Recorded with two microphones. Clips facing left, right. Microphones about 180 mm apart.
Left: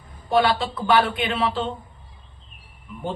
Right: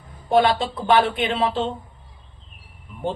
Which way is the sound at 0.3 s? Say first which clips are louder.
Right 2 dB; 20° right (ahead or behind).